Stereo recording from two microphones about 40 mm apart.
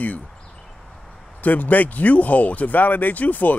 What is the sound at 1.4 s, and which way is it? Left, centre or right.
Speech, left.